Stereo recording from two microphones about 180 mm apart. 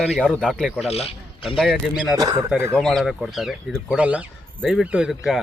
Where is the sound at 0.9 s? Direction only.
35° left (ahead or behind).